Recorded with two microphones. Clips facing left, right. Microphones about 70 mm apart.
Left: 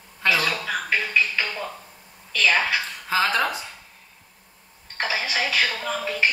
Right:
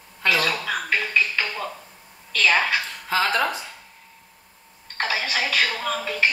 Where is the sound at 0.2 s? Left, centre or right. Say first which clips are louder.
Even; centre.